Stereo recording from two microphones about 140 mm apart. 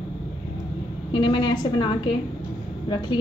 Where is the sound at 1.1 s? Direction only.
35° left (ahead or behind).